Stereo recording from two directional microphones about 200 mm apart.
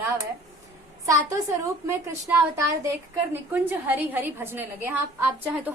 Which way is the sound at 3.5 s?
10° right (ahead or behind).